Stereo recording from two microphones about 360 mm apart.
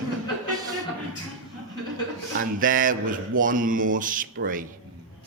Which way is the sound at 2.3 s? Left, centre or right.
Right.